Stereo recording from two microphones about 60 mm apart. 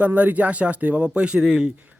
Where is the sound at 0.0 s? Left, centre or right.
Right.